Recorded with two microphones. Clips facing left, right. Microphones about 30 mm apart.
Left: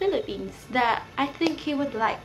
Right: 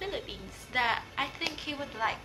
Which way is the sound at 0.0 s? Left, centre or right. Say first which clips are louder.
Left 11 dB; centre.